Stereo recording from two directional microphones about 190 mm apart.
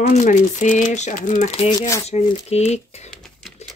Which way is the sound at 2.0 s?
35° left (ahead or behind).